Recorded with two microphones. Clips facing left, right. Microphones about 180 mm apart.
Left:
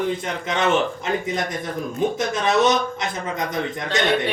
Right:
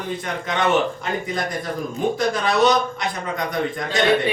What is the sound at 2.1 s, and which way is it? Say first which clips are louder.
Speech: right 1 dB; 20° left (ahead or behind).